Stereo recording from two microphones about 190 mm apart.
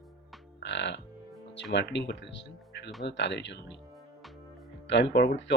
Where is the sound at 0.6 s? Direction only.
65° left (ahead or behind).